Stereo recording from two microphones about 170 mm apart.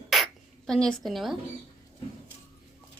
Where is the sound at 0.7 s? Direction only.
5° left (ahead or behind).